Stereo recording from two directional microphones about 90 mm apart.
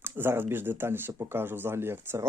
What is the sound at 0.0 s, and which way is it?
Speech, 25° right (ahead or behind).